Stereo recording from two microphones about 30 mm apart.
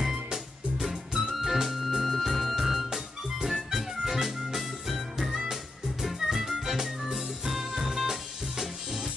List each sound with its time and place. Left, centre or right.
0.0 s music: right
1.3 s music: centre
3.5 s music: centre
4.6 s music: centre
6.1 s music: centre